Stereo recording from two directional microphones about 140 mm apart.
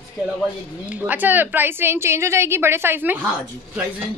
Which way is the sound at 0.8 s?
10° right (ahead or behind).